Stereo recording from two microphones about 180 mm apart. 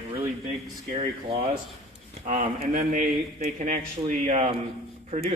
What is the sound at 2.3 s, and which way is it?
A man's voice, 45° right (ahead or behind).